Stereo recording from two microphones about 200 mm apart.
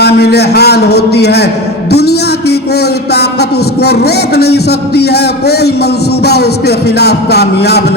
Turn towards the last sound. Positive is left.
turn(degrees=55)  # may be behind; listen again after turning